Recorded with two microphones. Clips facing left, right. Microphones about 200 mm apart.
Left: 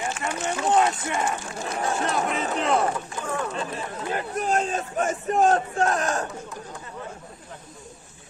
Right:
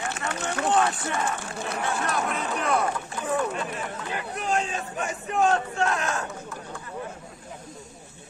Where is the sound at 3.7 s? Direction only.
40° left (ahead or behind).